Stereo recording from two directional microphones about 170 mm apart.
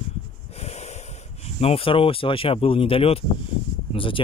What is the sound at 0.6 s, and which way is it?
Wheeze, 40° left (ahead or behind).